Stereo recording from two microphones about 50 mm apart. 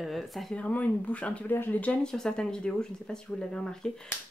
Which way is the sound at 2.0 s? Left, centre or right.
Centre.